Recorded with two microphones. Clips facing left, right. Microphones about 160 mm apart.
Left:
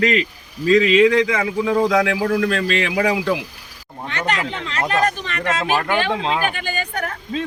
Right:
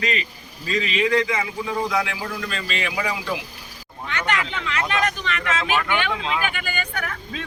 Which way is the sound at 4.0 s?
35° left (ahead or behind).